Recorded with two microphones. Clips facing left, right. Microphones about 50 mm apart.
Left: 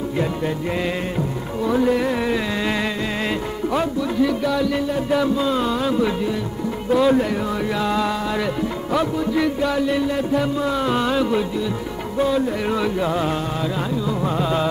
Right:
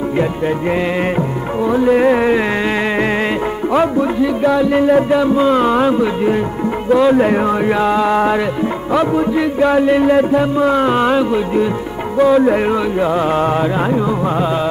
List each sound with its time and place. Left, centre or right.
1.1 s music: right
2.0 s music: right
4.4 s music: right
6.9 s music: right
7.2 s music: right
9.6 s music: right
12.6 s music: right
13.6 s music: right
14.2 s music: right